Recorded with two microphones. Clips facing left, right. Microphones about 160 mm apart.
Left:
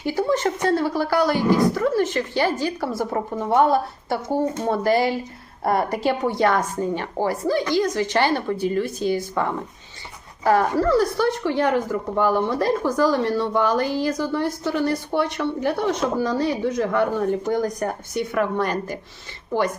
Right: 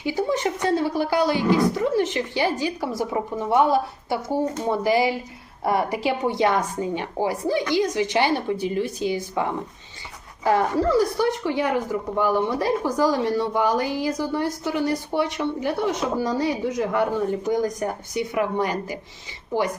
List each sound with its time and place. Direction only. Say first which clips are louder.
0.0 s speech: left 2 dB; 15° right (ahead or behind)